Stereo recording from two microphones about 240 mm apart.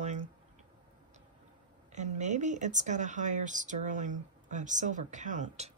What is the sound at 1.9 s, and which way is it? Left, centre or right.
Speech, right.